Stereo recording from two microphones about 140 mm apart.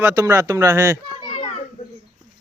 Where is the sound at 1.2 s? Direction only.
40° left (ahead or behind).